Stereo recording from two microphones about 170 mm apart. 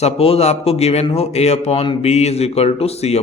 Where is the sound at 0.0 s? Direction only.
35° left (ahead or behind).